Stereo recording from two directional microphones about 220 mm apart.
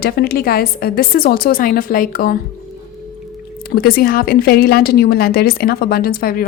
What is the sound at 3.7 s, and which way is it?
A woman's voice, 45° left (ahead or behind).